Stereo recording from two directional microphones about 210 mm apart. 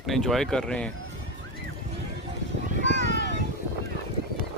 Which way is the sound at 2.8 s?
60° right (ahead or behind).